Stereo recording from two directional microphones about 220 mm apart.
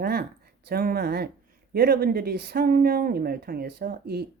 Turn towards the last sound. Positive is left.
turn(degrees=-45)  # may be behind; listen again after turning